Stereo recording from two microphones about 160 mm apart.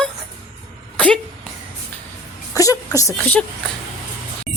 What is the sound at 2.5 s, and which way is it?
Speech, 20° left (ahead or behind).